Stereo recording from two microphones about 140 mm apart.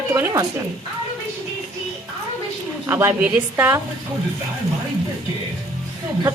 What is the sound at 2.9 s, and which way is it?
Speech, 15° right (ahead or behind).